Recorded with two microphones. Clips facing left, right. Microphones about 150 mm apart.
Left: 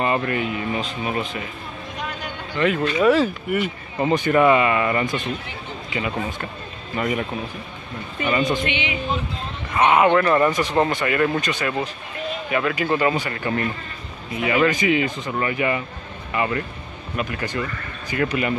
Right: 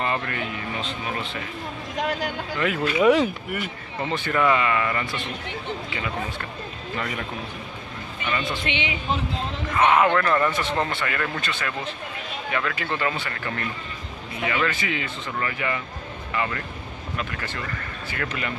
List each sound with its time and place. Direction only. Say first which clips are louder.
0.0 s speech: left 5 dB; 15° left (ahead or behind)
2.0 s a sound: right 6 dB; 90° right
2.5 s speech: left 5 dB; 5° right (ahead or behind)
4.0 s speech: left 6 dB; 15° left (ahead or behind)
8.2 s speech: left 7 dB; 40° left (ahead or behind)
8.6 s speech: left 2 dB; 30° right (ahead or behind)
9.8 s speech: left 3 dB; 10° left (ahead or behind)